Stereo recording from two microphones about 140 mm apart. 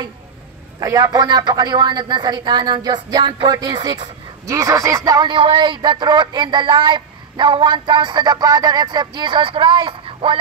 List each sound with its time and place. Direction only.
0.7 s a man's voice: 25° right (ahead or behind)
5.3 s speech: 35° right (ahead or behind)